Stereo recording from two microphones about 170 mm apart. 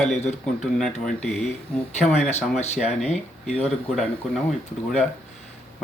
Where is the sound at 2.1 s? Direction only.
40° left (ahead or behind).